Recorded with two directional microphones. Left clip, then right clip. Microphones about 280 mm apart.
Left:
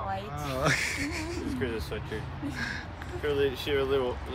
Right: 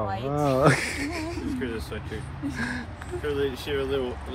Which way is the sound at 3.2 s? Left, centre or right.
Left.